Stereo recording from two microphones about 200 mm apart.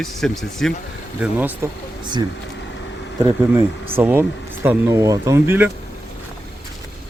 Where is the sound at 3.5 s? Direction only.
10° right (ahead or behind).